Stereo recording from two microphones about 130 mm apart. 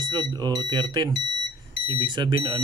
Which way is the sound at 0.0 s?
35° right (ahead or behind).